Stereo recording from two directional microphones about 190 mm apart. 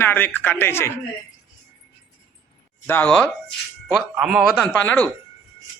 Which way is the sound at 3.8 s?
5° right (ahead or behind).